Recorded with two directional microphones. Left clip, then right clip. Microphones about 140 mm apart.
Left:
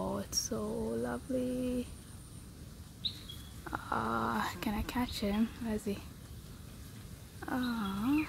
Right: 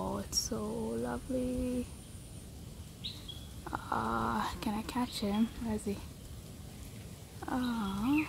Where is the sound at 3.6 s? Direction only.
15° left (ahead or behind).